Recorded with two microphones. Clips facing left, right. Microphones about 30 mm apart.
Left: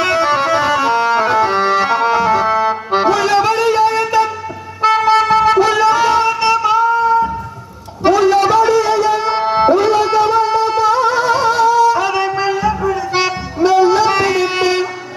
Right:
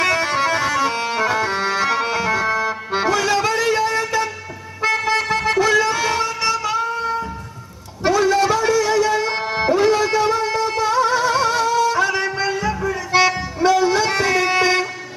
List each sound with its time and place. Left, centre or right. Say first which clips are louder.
0.0 s music: left 4 dB; left
1.2 s accordion: left 6 dB; left
5.1 s music: left 8 dB; left
8.0 s music: left 5 dB; left
9.8 s music: left 4 dB; left